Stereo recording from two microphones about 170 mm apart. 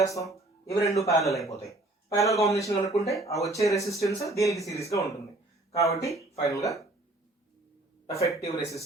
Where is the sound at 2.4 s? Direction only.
40° left (ahead or behind).